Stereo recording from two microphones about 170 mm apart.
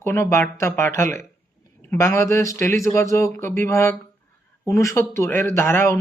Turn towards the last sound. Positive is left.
turn(degrees=15)  # may be behind; listen again after turning